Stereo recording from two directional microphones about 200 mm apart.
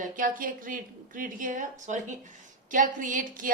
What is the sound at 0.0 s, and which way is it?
A woman's voice, 45° right (ahead or behind).